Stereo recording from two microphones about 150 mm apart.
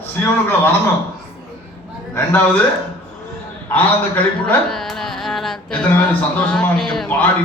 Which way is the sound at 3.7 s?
10° left (ahead or behind).